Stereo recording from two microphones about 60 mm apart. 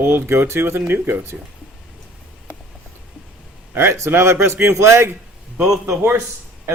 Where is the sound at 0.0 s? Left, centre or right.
Right.